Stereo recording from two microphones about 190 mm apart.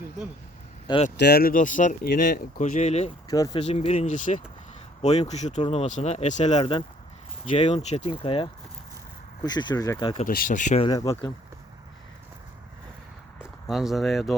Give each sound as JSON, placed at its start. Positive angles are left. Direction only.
{"t": 1.1, "sound": "speech", "side_deg": 60}
{"t": 3.2, "sound": "speech", "side_deg": 20}
{"t": 3.7, "sound": "speech", "side_deg": 35}
{"t": 10.2, "sound": "speech", "side_deg": 45}
{"t": 10.8, "sound": "speech", "side_deg": 15}
{"t": 13.7, "sound": "speech", "side_deg": 0}